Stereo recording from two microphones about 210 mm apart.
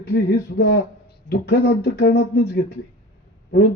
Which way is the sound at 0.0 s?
50° left (ahead or behind).